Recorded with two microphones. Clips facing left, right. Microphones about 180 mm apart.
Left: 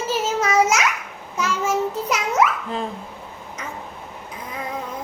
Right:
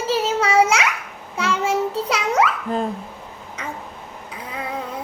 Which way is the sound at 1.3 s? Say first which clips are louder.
Right 1 dB; 30° right (ahead or behind).